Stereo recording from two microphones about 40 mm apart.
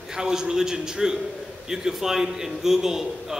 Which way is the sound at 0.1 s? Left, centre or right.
Centre.